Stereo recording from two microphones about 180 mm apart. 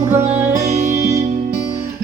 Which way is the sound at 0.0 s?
15° right (ahead or behind).